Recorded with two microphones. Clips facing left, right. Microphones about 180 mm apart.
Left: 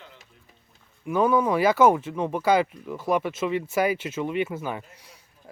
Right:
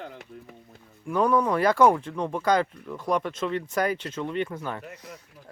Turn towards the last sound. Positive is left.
turn(degrees=-70)  # may be behind; listen again after turning